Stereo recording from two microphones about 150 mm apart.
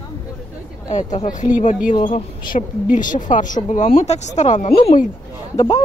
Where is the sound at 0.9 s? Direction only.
50° left (ahead or behind).